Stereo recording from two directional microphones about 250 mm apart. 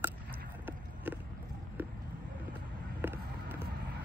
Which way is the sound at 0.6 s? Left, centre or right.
Centre.